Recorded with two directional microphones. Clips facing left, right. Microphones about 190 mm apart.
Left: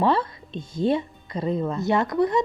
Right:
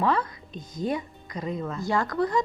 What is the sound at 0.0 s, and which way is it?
Speech, 30° left (ahead or behind).